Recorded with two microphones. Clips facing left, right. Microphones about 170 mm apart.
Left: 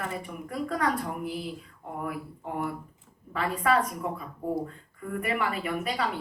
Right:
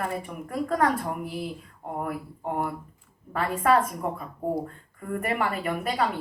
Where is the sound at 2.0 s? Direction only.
45° right (ahead or behind).